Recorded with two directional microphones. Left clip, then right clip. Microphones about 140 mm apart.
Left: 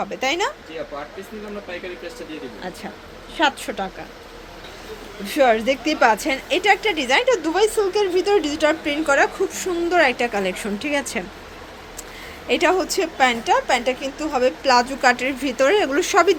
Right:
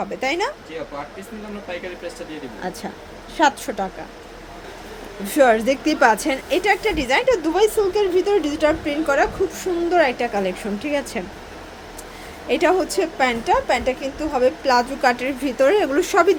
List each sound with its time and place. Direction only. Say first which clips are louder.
0.1 s a woman's voice: even; 10° right (ahead or behind)
2.6 s a woman's voice: right 3 dB; 15° right (ahead or behind)
5.2 s a woman's voice: right 1 dB; 20° right (ahead or behind); by 11.2 s 5° left (ahead or behind)
12.5 s a woman's voice: even; 5° right (ahead or behind)